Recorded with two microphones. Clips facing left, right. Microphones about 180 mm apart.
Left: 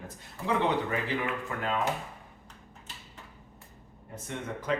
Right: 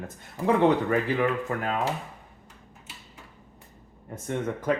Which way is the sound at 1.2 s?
45° right (ahead or behind).